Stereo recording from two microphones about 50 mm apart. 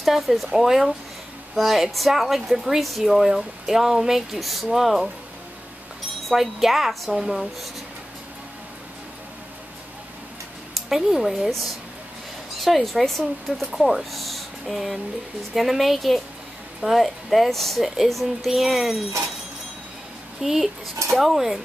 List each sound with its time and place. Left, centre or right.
0.0 s a woman's voice: centre
6.2 s a woman's voice: centre
10.9 s speech: centre
12.6 s a woman's voice: centre
20.4 s a woman's voice: centre